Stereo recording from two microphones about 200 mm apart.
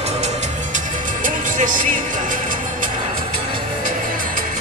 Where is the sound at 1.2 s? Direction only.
40° right (ahead or behind).